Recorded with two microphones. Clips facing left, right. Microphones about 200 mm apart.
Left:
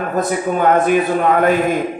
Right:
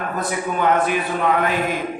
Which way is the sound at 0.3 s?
45° left (ahead or behind).